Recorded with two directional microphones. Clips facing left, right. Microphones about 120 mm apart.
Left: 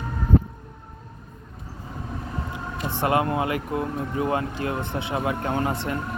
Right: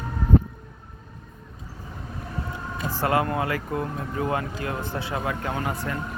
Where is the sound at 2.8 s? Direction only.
25° left (ahead or behind).